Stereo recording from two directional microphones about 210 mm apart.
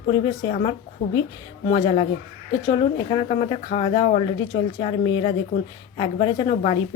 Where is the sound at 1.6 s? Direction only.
20° left (ahead or behind).